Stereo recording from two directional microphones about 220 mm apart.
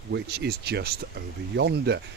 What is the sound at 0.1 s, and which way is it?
Speech, 50° right (ahead or behind).